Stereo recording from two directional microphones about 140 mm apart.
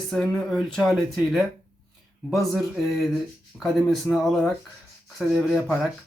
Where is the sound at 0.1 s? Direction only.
Centre (ahead or behind).